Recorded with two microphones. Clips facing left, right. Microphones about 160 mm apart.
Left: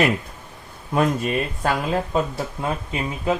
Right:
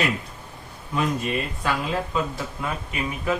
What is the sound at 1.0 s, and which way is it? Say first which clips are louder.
Speech: left 4 dB; 45° left (ahead or behind).